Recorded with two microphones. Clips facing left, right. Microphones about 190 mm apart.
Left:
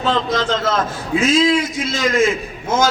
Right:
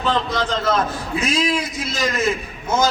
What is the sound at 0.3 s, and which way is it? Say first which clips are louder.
A man's voice: left 2 dB; 90° left.